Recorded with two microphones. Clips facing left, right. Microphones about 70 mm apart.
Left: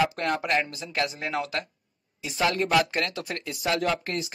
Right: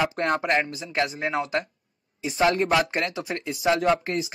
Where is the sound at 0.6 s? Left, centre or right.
Centre.